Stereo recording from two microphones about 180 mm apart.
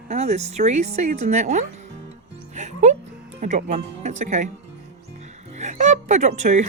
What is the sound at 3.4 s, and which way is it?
Speech, 40° right (ahead or behind).